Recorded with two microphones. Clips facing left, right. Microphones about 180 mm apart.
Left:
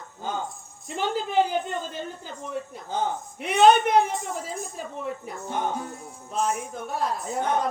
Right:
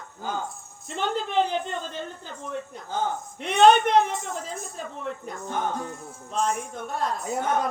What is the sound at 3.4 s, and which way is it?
A woman's voice, 5° left (ahead or behind).